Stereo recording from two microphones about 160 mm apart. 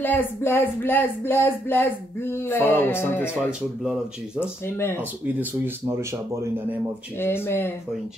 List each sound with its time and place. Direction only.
0.0 s speech: 10° left (ahead or behind)
4.4 s speech: 15° left (ahead or behind)
5.2 s speech: 15° right (ahead or behind)
7.2 s speech: 15° left (ahead or behind)